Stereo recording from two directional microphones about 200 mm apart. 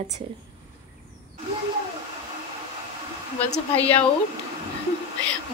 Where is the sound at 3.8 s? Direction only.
5° left (ahead or behind).